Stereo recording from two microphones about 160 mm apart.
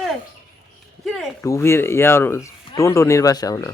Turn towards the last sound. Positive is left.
turn(degrees=20)  # may be behind; listen again after turning